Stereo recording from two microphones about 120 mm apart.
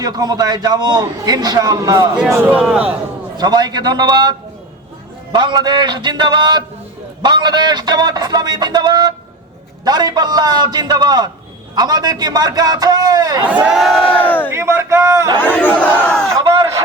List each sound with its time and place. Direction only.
0.0 s a man's voice: 30° right (ahead or behind)
2.3 s a man's voice: 15° right (ahead or behind)
3.3 s a man's voice: 35° right (ahead or behind)
13.5 s crowd: 10° right (ahead or behind); by 14.5 s 15° left (ahead or behind)
14.5 s a man's voice: 20° right (ahead or behind)
15.4 s speech: 15° left (ahead or behind)
16.4 s a sound: 35° right (ahead or behind)